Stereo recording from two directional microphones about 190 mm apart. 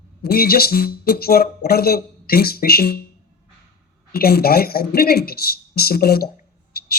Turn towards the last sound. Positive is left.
turn(degrees=55)  # may be behind; listen again after turning